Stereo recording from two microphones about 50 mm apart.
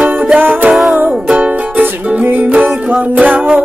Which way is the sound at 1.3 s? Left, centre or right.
Right.